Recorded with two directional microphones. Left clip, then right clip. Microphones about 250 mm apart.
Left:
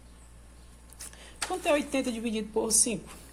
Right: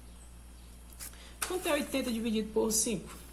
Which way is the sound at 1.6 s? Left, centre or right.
Left.